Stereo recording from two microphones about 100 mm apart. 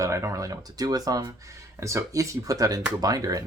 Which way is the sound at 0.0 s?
30° right (ahead or behind).